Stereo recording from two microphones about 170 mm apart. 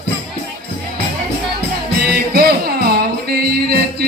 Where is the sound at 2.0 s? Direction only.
65° right (ahead or behind).